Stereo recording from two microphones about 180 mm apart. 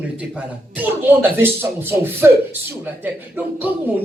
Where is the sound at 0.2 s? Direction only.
10° right (ahead or behind).